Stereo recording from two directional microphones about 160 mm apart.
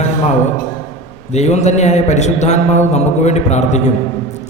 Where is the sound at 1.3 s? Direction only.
45° left (ahead or behind).